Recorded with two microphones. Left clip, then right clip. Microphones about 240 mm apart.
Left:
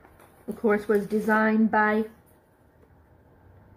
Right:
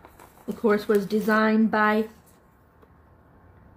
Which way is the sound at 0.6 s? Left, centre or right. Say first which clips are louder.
Right 1 dB; centre.